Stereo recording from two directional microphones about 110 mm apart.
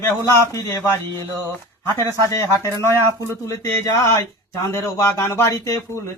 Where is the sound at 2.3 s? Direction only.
25° left (ahead or behind).